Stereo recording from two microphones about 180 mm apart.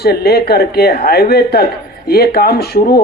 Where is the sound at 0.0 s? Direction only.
60° left (ahead or behind).